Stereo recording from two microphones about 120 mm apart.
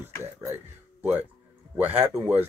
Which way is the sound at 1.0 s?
15° right (ahead or behind).